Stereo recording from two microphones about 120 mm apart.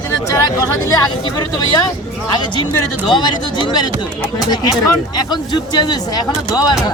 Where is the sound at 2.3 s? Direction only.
40° left (ahead or behind).